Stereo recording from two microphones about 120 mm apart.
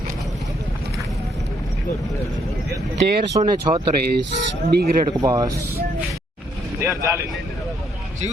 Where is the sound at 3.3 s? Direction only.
35° right (ahead or behind).